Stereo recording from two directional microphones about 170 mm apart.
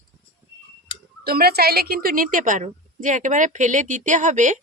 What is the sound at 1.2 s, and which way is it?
A woman's voice, 65° right (ahead or behind).